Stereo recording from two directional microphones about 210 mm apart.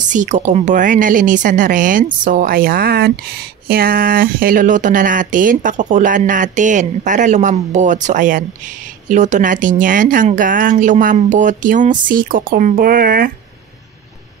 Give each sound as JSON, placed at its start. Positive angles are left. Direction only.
{"t": 0.1, "sound": "speech", "side_deg": -35}